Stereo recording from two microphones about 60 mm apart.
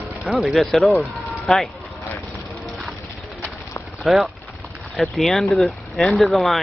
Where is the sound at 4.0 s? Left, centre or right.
Centre.